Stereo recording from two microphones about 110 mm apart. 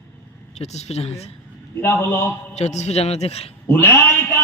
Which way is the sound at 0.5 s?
85° left.